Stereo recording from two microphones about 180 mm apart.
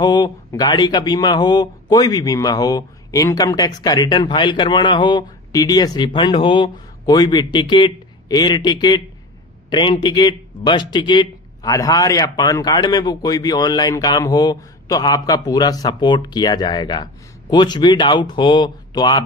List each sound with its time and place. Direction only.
0.0 s a man's voice: 20° left (ahead or behind)